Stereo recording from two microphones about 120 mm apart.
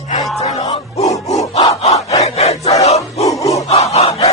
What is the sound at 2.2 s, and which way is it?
Crowd, 65° left (ahead or behind).